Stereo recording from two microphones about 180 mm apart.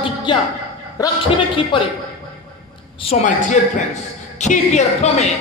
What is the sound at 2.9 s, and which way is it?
A man's voice, 35° left (ahead or behind).